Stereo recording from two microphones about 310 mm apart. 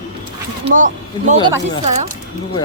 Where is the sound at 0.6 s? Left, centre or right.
Right.